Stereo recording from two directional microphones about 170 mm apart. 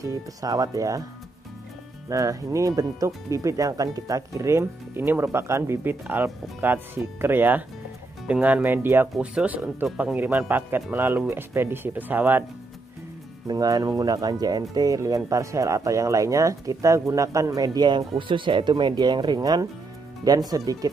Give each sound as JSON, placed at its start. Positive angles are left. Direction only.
{"t": 0.0, "sound": "speech", "side_deg": -20}
{"t": 2.0, "sound": "speech", "side_deg": -20}
{"t": 13.5, "sound": "speech", "side_deg": -20}